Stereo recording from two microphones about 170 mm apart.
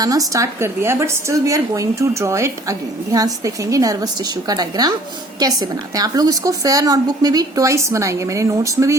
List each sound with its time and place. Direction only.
0.0 s a woman's voice: 20° right (ahead or behind)